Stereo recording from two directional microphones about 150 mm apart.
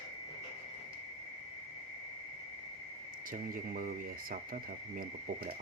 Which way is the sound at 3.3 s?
70° right (ahead or behind).